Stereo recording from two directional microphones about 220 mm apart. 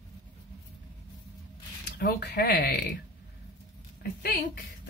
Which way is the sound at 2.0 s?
50° left (ahead or behind).